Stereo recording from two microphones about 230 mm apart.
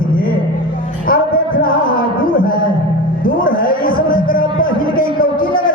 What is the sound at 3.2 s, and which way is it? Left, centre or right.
A man's voice, left.